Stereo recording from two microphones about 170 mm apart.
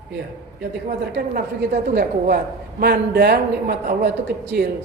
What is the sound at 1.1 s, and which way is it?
Speech, 60° right (ahead or behind).